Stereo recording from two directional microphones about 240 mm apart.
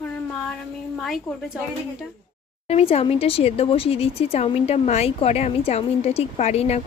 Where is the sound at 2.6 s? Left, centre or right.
Left.